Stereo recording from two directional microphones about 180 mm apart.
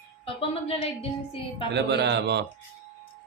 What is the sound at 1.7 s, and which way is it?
Speech, 70° right (ahead or behind).